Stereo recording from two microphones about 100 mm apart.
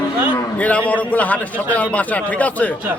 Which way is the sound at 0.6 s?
15° left (ahead or behind).